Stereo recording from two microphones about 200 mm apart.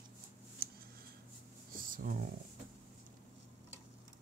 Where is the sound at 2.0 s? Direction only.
40° right (ahead or behind).